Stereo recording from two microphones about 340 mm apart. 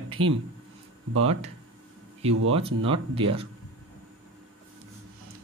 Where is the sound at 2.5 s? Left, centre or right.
Centre.